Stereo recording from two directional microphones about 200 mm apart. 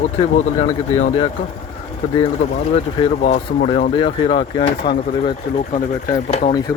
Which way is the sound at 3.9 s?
25° left (ahead or behind).